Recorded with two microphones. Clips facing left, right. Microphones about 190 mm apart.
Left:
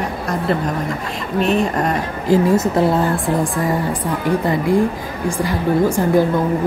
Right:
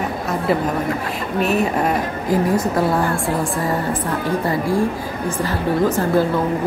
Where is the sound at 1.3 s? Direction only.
5° right (ahead or behind).